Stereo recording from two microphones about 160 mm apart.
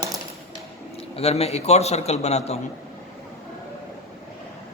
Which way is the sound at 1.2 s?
40° left (ahead or behind).